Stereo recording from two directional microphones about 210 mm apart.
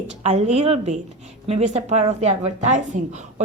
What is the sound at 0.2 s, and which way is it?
A woman's voice, 30° right (ahead or behind).